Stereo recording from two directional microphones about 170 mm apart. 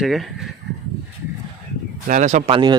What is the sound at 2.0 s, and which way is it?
Speech, 50° right (ahead or behind).